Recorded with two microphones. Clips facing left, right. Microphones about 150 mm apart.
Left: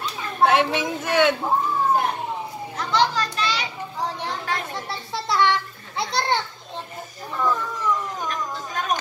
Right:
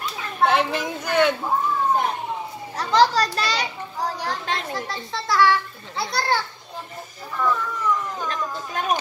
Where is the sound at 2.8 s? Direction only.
35° right (ahead or behind).